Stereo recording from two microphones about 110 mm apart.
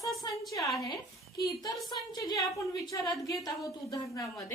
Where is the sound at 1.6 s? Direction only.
40° left (ahead or behind).